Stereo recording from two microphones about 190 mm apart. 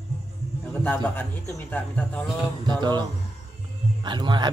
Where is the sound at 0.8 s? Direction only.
10° left (ahead or behind).